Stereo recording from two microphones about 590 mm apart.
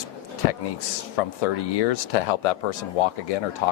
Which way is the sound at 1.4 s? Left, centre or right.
Left.